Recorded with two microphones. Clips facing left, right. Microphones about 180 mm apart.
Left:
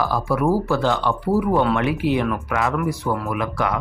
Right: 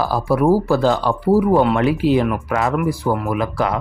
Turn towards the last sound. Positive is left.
turn(degrees=-30)  # may be behind; listen again after turning